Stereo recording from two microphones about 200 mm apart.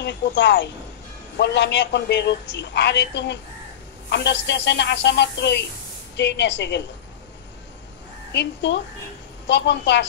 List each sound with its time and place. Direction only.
0.0 s a man's voice: 60° left (ahead or behind)
8.3 s a man's voice: 60° left (ahead or behind)